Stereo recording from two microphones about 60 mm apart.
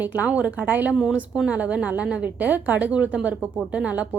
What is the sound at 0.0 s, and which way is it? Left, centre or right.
A woman's voice, right.